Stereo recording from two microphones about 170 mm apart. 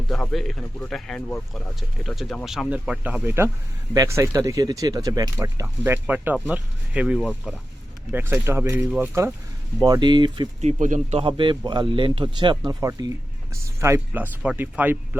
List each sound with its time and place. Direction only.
0.1 s speech: centre (ahead or behind); by 9.3 s 15° right (ahead or behind)
9.8 s speech: 25° right (ahead or behind)
10.6 s speech: 45° right (ahead or behind)
11.2 s speech: 30° right (ahead or behind); by 15.2 s 10° right (ahead or behind)